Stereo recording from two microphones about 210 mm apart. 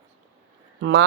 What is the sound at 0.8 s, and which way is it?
Speech, 55° right (ahead or behind).